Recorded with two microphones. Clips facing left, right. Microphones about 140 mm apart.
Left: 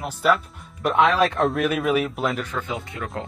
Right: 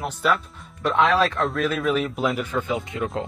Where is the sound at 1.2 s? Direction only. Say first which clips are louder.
Left 2 dB; 20° left (ahead or behind).